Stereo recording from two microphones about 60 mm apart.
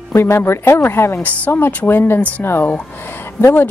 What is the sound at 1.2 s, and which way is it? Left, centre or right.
Speech, left.